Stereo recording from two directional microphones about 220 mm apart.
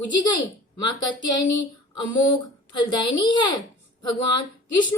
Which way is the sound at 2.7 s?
20° left (ahead or behind).